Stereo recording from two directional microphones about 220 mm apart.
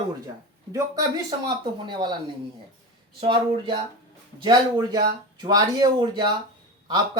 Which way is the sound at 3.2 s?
20° right (ahead or behind).